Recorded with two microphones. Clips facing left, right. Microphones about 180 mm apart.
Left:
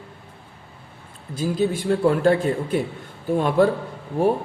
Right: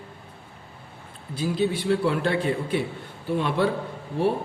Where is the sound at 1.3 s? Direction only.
45° left (ahead or behind).